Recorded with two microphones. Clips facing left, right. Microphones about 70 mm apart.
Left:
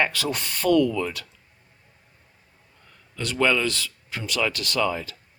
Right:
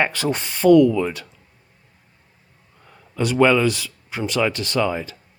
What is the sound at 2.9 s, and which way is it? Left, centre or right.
Speech, centre.